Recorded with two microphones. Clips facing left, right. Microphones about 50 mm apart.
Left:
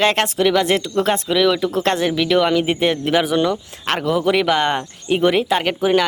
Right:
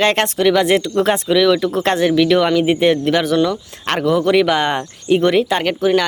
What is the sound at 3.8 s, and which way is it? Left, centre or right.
Speech, centre.